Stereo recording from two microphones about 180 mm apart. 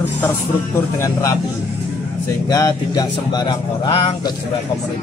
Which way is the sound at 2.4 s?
20° left (ahead or behind).